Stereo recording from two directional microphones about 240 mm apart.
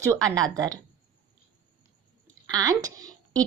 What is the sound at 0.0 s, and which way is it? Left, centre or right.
Speech, centre.